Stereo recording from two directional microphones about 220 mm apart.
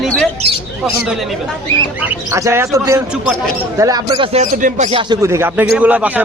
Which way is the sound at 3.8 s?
15° right (ahead or behind).